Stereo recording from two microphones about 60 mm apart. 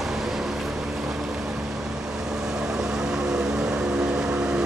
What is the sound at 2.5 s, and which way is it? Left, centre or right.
Vehicle, centre.